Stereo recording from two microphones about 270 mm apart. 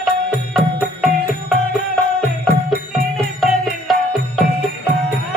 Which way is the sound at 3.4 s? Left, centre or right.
Centre.